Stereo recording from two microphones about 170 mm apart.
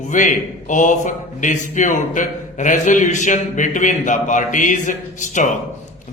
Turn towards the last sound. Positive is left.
turn(degrees=50)  # may be behind; listen again after turning